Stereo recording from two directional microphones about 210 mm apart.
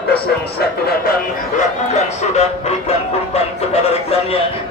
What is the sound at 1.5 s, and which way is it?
Music, 30° left (ahead or behind).